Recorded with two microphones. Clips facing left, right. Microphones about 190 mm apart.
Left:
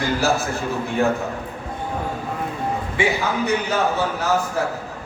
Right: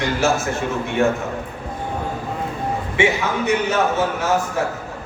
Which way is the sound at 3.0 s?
35° left (ahead or behind).